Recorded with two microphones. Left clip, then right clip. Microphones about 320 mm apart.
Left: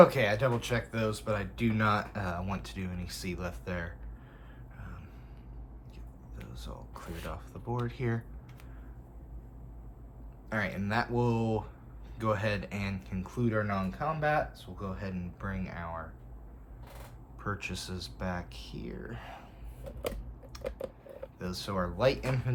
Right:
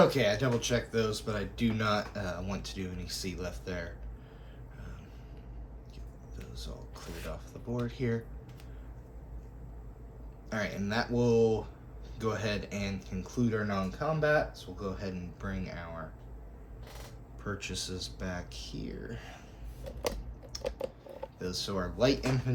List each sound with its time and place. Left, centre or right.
0.0 s speech: centre
6.3 s a sound: centre
10.5 s speech: left
17.4 s speech: centre
20.5 s a sound: centre
21.3 s speech: centre